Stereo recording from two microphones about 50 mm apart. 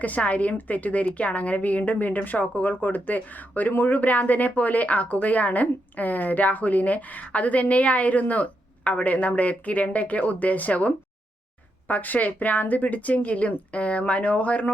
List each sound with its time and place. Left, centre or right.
0.0 s a woman's voice: left